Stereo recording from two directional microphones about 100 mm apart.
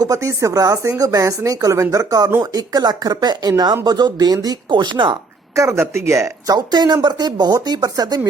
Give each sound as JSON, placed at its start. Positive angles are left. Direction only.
{"t": 0.0, "sound": "speech", "side_deg": -35}
{"t": 5.5, "sound": "speech", "side_deg": -30}
{"t": 6.7, "sound": "speech", "side_deg": -45}